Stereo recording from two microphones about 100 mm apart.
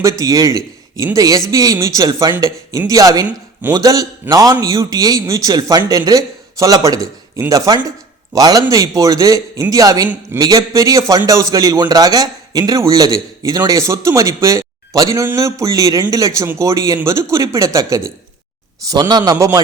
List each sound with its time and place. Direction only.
0.0 s a man's voice: 35° right (ahead or behind)
18.9 s speech: 45° right (ahead or behind)